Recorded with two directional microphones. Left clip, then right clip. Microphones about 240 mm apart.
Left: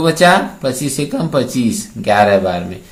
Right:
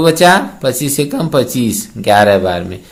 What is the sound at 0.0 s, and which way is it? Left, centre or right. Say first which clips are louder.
Mantra: right 2 dB; right.